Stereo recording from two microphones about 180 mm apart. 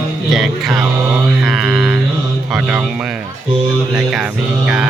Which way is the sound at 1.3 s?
5° right (ahead or behind).